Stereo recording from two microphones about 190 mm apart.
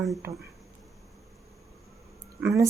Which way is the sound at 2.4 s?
15° right (ahead or behind).